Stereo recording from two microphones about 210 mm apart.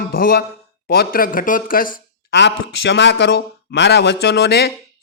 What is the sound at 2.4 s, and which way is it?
A man's voice, 55° left (ahead or behind).